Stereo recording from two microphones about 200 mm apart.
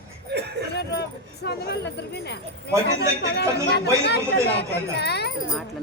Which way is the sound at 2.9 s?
55° left (ahead or behind).